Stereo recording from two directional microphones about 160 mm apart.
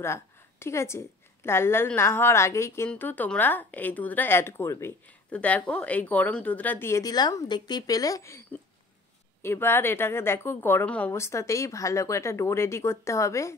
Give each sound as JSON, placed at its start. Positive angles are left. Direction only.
{"t": 0.0, "sound": "a woman's voice", "side_deg": 15}